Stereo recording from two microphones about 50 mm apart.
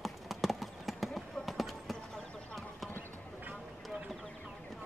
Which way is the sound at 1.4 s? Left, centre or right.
Centre.